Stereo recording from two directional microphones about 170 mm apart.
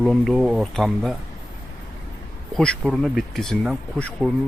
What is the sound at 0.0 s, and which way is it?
Speech, centre (ahead or behind).